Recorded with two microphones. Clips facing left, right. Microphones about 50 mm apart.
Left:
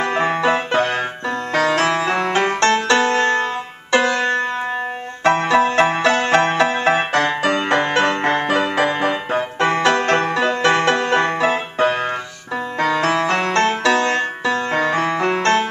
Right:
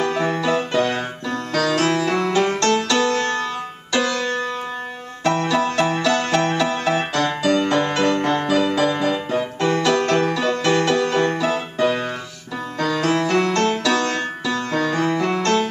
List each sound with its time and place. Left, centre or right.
0.0 s music: left